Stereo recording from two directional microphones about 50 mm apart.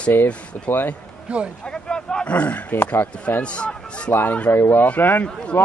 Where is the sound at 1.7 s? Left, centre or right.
Centre.